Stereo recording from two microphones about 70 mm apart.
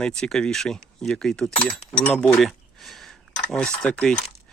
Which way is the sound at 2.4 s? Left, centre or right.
Centre.